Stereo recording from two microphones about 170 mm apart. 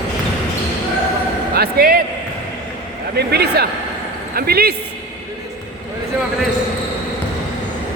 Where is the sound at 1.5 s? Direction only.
65° right (ahead or behind).